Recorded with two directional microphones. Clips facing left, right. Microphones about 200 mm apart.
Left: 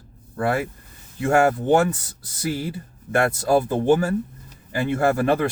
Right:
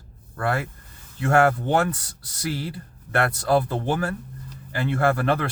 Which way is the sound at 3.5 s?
15° left (ahead or behind).